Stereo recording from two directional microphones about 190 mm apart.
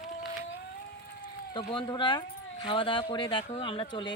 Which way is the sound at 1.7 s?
25° left (ahead or behind).